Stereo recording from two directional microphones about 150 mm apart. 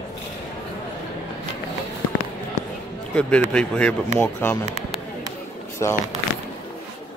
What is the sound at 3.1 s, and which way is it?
A man's voice, 10° left (ahead or behind).